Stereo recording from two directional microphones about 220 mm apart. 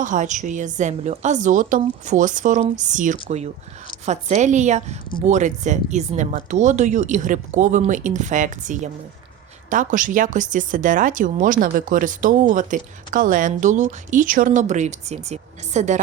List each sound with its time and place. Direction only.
0.0 s speech: 35° right (ahead or behind)